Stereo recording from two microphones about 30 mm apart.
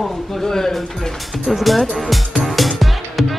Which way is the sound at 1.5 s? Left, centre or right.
Centre.